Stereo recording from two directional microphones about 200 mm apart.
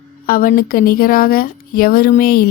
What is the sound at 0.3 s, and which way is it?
Speech, 45° left (ahead or behind).